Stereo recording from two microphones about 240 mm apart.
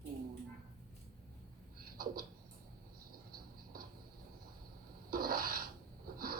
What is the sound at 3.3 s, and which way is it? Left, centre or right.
Cricket, right.